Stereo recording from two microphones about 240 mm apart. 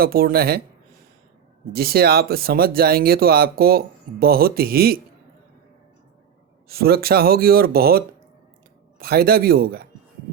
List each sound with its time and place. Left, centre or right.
0.0 s speech: right
1.7 s speech: right
6.7 s speech: right